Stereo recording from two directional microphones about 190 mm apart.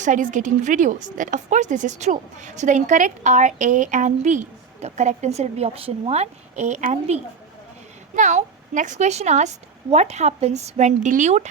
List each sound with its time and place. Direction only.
0.0 s a woman's voice: 45° right (ahead or behind)